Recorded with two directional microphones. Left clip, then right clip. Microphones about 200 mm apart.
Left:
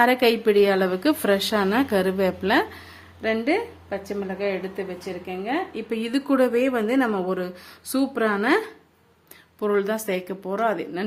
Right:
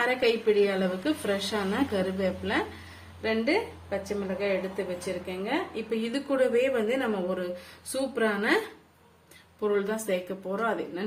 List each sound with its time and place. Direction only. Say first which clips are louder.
0.0 s a woman's voice: left 6 dB; 60° left (ahead or behind)